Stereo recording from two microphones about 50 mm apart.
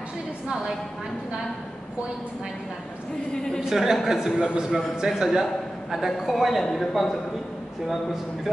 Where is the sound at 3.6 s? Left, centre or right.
Centre.